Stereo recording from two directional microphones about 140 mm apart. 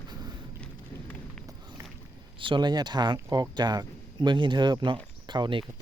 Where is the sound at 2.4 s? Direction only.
35° right (ahead or behind).